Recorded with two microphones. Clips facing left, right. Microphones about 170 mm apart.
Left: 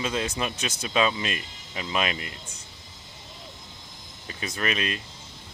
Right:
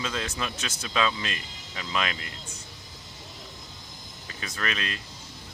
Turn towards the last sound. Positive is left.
turn(degrees=20)  # may be behind; listen again after turning